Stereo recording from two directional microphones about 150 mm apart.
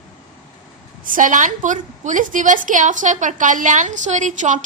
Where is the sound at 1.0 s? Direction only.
60° right (ahead or behind).